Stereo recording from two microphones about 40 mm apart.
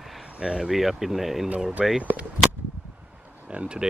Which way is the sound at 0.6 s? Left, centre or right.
Centre.